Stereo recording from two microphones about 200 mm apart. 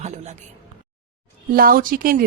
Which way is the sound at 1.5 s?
45° right (ahead or behind).